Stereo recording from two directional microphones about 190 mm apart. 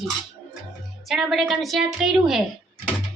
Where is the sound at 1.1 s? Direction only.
Centre (ahead or behind).